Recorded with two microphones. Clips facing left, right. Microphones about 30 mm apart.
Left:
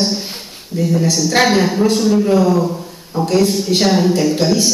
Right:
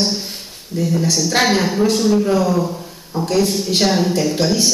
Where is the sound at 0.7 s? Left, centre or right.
Centre.